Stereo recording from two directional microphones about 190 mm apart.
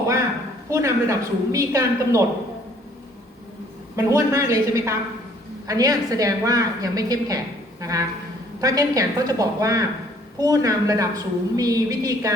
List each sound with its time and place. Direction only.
0.7 s a woman's voice: 15° right (ahead or behind)
3.9 s a woman's voice: 15° right (ahead or behind)